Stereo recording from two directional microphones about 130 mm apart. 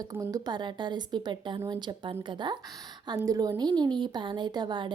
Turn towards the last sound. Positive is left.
turn(degrees=-35)  # may be behind; listen again after turning